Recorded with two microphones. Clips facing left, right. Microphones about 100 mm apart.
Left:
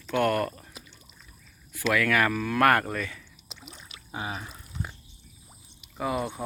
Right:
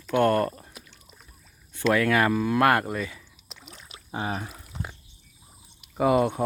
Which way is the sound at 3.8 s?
35° right (ahead or behind).